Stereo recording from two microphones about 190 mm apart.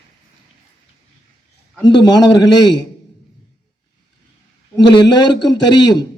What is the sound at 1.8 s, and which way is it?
Speech, 20° left (ahead or behind).